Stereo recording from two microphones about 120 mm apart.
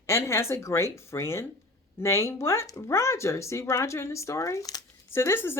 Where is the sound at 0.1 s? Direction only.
20° left (ahead or behind).